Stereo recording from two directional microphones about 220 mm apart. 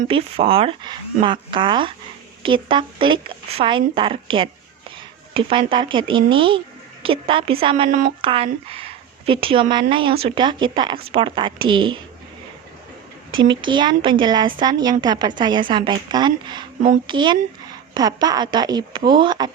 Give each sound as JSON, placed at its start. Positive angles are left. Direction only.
{"t": 0.0, "sound": "speech", "side_deg": -25}
{"t": 13.4, "sound": "speech", "side_deg": -20}